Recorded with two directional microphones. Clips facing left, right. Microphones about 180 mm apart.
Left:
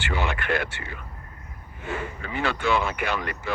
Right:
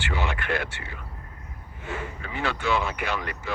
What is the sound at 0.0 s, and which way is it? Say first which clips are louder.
Speech: left 2 dB; 55° left (ahead or behind).